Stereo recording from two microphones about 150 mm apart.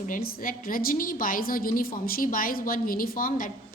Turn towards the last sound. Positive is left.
turn(degrees=70)  # may be behind; listen again after turning